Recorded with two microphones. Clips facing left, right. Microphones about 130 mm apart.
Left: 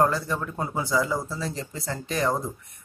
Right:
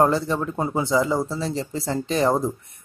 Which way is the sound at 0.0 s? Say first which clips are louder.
Right 4 dB; 25° right (ahead or behind).